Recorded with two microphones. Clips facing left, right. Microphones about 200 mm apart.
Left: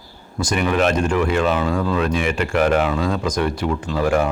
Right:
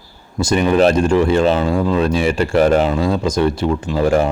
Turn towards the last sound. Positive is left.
turn(degrees=-25)  # may be behind; listen again after turning